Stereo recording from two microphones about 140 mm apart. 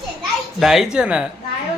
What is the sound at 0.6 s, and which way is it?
Speech, centre (ahead or behind).